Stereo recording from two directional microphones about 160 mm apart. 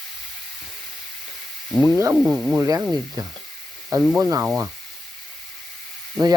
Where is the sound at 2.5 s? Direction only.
20° right (ahead or behind).